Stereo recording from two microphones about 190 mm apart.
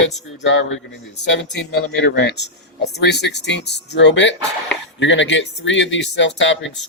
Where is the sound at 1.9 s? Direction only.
65° left (ahead or behind).